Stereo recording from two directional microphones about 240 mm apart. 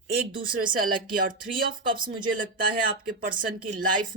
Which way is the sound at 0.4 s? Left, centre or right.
Right.